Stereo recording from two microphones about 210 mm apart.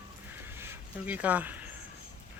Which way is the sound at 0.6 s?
10° right (ahead or behind).